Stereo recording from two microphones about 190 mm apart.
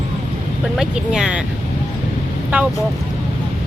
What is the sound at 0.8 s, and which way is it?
Speech, 5° right (ahead or behind).